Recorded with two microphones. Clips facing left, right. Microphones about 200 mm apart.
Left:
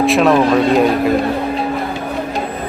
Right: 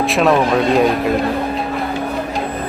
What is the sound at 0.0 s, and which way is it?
Speech, centre (ahead or behind).